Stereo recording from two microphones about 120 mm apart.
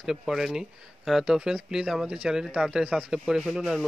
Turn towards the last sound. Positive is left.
turn(degrees=0)  # may be behind; listen again after turning